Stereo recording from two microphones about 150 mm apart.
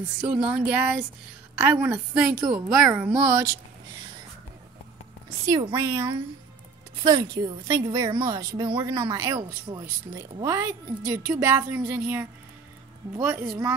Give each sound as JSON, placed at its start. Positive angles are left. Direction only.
{"t": 0.3, "sound": "a woman's voice", "side_deg": -10}
{"t": 5.4, "sound": "a woman's voice", "side_deg": -30}